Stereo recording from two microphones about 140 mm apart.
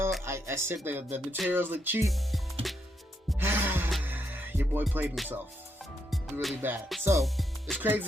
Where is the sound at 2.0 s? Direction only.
Centre (ahead or behind).